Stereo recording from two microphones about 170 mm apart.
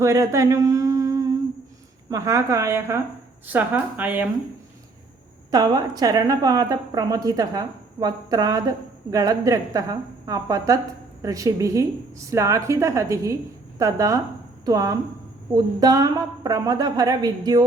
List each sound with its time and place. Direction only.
0.0 s a sound: 20° right (ahead or behind)
2.0 s a woman's voice: 20° right (ahead or behind)
5.5 s a woman's voice: 25° right (ahead or behind)